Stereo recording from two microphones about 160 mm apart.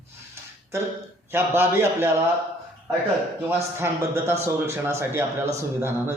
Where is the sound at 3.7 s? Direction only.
15° right (ahead or behind).